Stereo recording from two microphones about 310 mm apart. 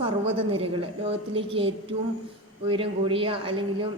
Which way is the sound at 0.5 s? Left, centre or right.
Centre.